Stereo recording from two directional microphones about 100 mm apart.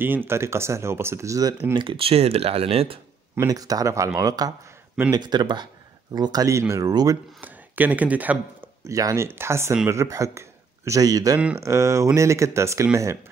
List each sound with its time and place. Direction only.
0.0 s speech: 20° right (ahead or behind)
1.8 s speech: 60° right (ahead or behind); by 3.0 s 80° right
3.3 s speech: 35° right (ahead or behind)
6.9 s speech: 40° right (ahead or behind)
7.3 s speech: 15° right (ahead or behind)
8.8 s speech: 35° right (ahead or behind)